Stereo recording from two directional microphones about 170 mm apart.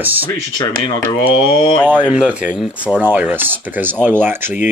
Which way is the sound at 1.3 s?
30° left (ahead or behind).